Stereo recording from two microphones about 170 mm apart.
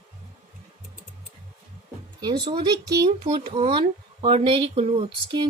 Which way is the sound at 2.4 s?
25° right (ahead or behind).